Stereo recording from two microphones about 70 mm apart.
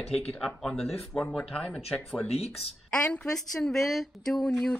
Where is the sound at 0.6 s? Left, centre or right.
Centre.